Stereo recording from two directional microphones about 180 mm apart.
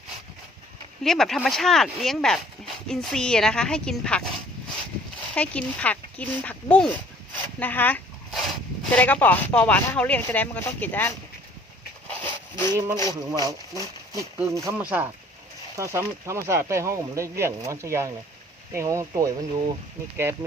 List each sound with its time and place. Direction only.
1.0 s a woman's voice: centre (ahead or behind)
5.3 s speech: 5° left (ahead or behind)
7.6 s a sound: 10° left (ahead or behind)
8.8 s speech: 5° left (ahead or behind)
12.2 s a sound: 25° right (ahead or behind)
13.4 s speech: 20° right (ahead or behind)